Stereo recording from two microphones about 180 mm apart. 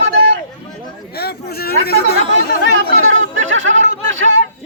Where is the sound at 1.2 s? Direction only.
60° left (ahead or behind).